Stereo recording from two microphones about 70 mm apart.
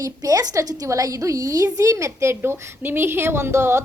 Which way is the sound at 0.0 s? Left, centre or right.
Right.